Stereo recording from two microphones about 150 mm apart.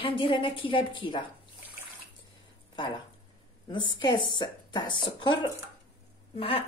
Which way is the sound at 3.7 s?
30° left (ahead or behind).